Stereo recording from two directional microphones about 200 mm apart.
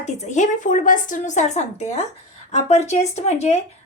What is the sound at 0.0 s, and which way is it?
A woman's voice, 35° left (ahead or behind).